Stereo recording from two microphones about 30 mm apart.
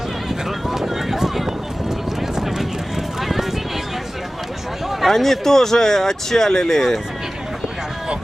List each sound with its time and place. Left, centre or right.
0.7 s run: centre
3.2 s clip-clop: centre
5.0 s speech: centre